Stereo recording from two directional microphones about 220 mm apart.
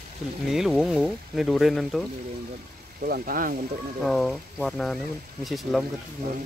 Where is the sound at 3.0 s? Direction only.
40° right (ahead or behind).